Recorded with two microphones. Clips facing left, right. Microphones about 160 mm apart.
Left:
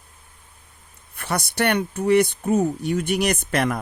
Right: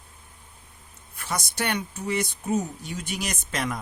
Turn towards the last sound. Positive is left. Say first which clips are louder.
# left 7 dB
turn(degrees=60)  # may be behind; listen again after turning